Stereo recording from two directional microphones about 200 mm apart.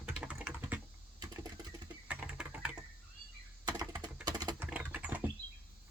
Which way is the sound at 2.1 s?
5° right (ahead or behind).